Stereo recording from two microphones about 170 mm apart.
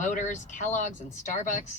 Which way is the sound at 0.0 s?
45° left (ahead or behind).